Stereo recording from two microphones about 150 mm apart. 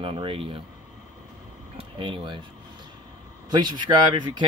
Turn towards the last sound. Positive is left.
turn(degrees=-30)  # may be behind; listen again after turning